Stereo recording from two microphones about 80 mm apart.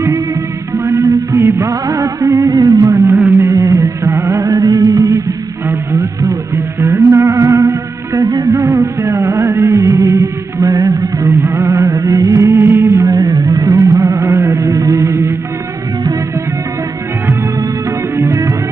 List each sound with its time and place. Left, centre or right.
0.8 s music of bollywood: right
3.4 s music: right
6.2 s music: right
11.2 s music: right
13.1 s music: right
18.1 s music: right